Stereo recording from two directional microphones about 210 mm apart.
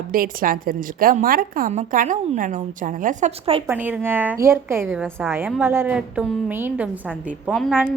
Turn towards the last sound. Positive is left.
turn(degrees=0)  # may be behind; listen again after turning